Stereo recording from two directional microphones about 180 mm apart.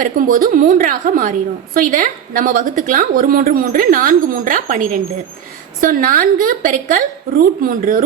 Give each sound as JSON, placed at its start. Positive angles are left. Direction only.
{"t": 0.0, "sound": "a woman's voice", "side_deg": -50}